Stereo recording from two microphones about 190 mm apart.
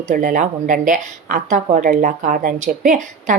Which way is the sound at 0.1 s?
45° right (ahead or behind).